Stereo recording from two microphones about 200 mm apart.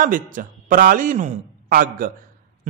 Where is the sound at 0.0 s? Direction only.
40° right (ahead or behind).